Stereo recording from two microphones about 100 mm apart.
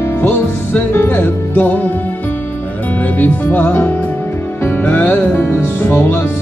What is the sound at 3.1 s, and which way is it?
Music, 15° left (ahead or behind).